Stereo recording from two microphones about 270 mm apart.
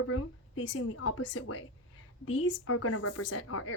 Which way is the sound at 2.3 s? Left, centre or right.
Left.